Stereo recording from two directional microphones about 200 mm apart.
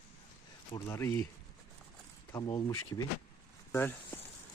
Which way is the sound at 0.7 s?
15° left (ahead or behind).